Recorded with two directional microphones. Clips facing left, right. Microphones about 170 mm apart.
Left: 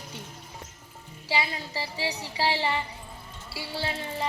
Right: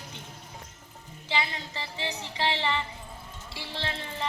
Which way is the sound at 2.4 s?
35° left (ahead or behind).